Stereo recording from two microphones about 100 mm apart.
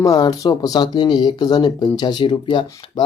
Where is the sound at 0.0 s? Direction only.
40° left (ahead or behind).